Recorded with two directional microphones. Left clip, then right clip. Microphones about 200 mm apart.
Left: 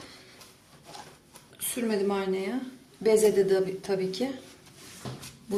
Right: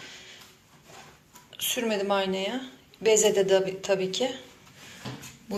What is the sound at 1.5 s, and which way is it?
A woman's voice, 10° left (ahead or behind).